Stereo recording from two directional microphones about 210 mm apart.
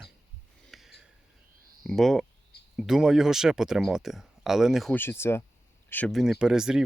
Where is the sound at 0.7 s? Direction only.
Centre (ahead or behind).